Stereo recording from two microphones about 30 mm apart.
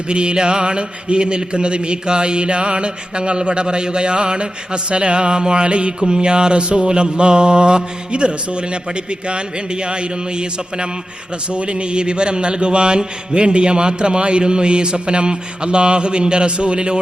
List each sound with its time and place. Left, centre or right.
0.1 s a man's voice: right